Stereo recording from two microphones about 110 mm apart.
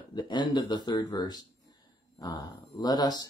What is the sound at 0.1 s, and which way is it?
Speech, 40° left (ahead or behind).